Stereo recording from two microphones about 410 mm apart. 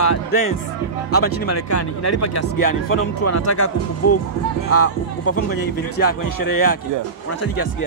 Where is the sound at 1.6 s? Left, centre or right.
Left.